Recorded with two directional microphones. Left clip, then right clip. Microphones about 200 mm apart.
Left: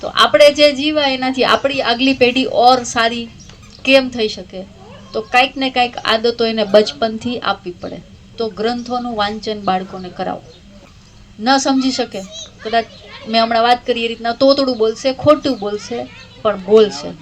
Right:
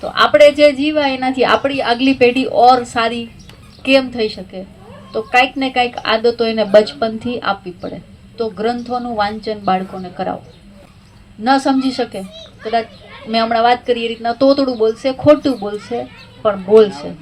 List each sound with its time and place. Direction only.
0.0 s a woman's voice: 25° left (ahead or behind)
11.4 s a woman's voice: 25° left (ahead or behind)
12.3 s a child's voice: 45° left (ahead or behind)
13.3 s a woman's voice: 25° left (ahead or behind)